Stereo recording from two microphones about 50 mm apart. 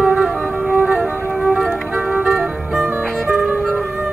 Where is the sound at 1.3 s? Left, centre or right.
Right.